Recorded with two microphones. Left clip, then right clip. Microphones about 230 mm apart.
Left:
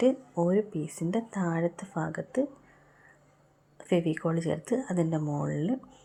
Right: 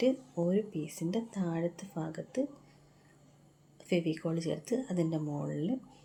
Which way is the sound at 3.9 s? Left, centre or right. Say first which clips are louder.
Left 5 dB; centre.